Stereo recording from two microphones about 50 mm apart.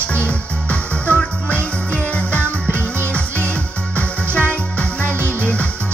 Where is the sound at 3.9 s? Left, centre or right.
Left.